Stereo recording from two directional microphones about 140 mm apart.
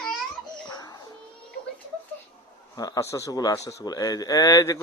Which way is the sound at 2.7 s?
25° left (ahead or behind).